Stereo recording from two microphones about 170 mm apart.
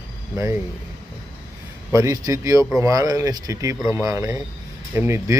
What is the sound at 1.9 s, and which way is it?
A man's voice, 20° right (ahead or behind).